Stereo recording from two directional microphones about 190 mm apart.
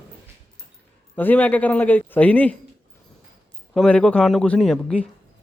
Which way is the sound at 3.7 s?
5° left (ahead or behind).